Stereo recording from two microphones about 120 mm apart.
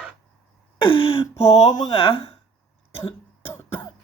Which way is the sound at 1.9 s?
50° left (ahead or behind).